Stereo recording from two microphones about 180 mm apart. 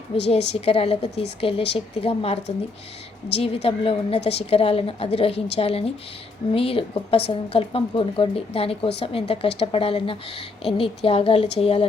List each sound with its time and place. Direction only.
0.1 s a woman's voice: 30° left (ahead or behind)